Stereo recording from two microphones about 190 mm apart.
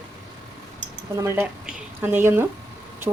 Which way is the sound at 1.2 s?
15° right (ahead or behind).